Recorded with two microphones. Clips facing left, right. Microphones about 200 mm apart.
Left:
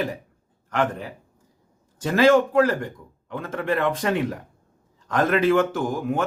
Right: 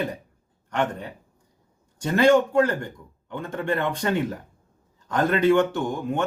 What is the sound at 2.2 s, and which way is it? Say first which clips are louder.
Speech: left 1 dB; centre (ahead or behind).